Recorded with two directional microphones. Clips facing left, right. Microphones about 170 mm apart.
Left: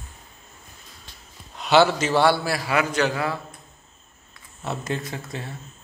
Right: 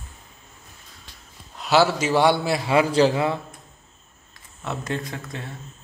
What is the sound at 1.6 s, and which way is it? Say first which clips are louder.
A man's voice: left 1 dB; 5° right (ahead or behind).